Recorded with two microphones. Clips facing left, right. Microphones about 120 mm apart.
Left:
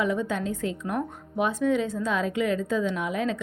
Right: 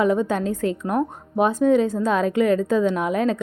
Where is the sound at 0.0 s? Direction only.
40° right (ahead or behind).